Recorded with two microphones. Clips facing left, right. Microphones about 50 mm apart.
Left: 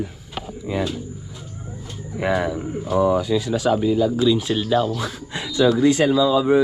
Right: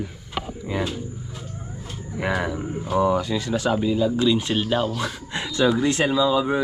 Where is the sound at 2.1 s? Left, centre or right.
Centre.